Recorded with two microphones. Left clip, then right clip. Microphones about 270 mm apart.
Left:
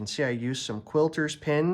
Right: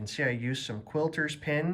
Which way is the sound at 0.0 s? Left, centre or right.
Centre.